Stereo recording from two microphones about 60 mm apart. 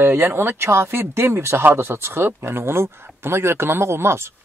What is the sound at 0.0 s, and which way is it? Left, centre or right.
A man's voice, right.